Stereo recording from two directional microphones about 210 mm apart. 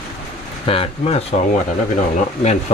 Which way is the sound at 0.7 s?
25° left (ahead or behind).